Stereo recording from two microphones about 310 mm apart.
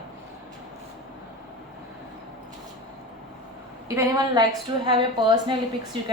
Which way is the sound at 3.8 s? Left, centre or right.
Centre.